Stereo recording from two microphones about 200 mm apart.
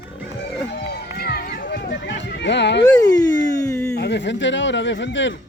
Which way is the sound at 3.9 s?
60° left (ahead or behind).